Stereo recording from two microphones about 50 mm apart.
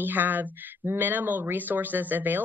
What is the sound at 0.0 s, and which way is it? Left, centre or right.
Speech, right.